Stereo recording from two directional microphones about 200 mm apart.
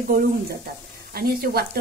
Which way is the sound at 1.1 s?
50° right (ahead or behind).